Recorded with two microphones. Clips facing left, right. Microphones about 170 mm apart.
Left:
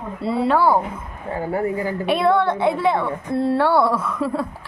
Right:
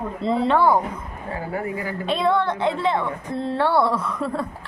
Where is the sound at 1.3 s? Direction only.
30° left (ahead or behind).